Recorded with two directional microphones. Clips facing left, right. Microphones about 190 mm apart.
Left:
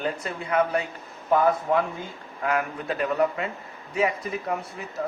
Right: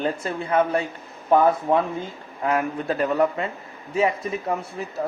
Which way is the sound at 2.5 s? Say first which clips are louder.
Right 3 dB; 30° right (ahead or behind).